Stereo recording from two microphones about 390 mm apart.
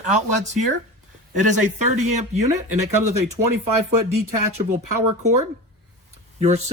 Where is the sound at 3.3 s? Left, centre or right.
Right.